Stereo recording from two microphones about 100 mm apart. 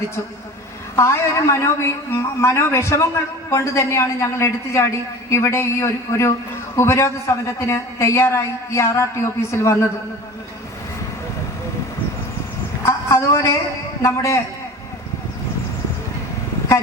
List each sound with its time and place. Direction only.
0.9 s a woman's voice: 30° left (ahead or behind)
12.8 s a sound: 25° left (ahead or behind)
14.0 s a woman's voice: 30° left (ahead or behind)